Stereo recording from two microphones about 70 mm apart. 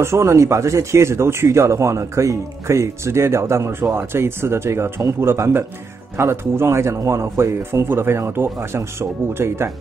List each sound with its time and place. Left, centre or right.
0.0 s speech: right